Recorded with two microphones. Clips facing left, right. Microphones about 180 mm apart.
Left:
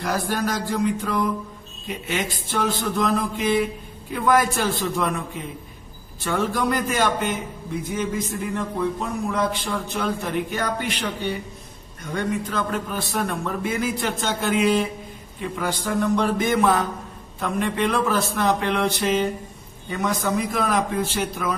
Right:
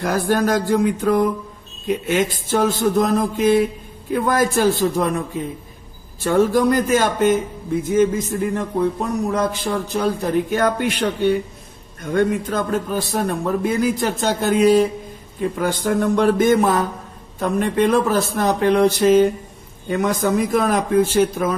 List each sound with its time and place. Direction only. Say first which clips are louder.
0.0 s a man's voice: right 6 dB; 50° right (ahead or behind)
6.2 s a man's voice: right 8 dB; 45° right (ahead or behind)
10.5 s a man's voice: right 7 dB; 50° right (ahead or behind)